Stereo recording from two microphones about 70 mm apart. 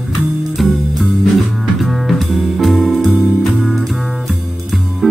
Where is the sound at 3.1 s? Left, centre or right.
Centre.